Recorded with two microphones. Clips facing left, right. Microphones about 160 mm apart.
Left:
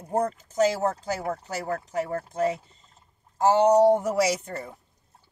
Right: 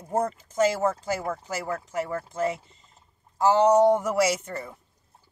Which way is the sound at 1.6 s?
40° left (ahead or behind).